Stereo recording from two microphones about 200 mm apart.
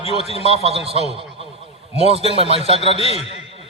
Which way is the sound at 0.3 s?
30° right (ahead or behind).